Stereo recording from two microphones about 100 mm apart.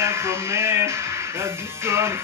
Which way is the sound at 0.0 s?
25° right (ahead or behind).